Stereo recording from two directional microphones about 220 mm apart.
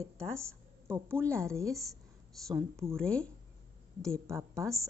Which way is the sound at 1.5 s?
15° right (ahead or behind).